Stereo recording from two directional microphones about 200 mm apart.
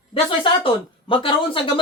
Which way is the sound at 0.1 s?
25° left (ahead or behind).